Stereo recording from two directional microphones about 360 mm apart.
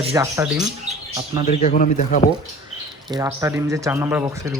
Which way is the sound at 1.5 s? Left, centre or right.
Left.